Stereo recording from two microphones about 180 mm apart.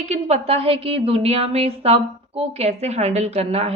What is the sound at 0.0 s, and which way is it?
A woman's voice, 35° right (ahead or behind).